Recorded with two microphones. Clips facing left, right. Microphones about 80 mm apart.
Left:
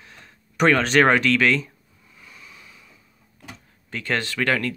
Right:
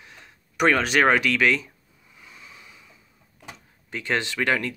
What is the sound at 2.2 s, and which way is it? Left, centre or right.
Waves, right.